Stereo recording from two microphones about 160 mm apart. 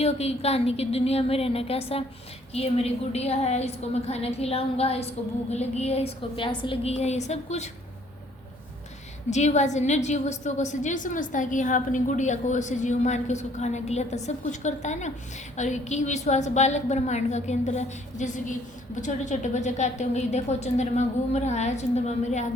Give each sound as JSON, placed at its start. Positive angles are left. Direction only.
{"t": 0.0, "sound": "a woman's voice", "side_deg": 40}
{"t": 9.3, "sound": "a woman's voice", "side_deg": 45}